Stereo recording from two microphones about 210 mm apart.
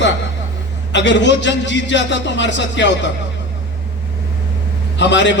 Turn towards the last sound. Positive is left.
turn(degrees=60)  # may be behind; listen again after turning